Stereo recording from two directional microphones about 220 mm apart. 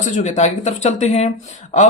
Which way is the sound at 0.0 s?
35° left (ahead or behind).